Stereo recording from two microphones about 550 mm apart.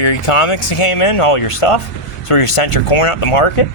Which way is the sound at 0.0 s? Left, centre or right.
Left.